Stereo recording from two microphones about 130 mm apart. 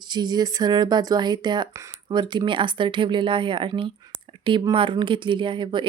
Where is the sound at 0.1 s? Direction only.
35° right (ahead or behind).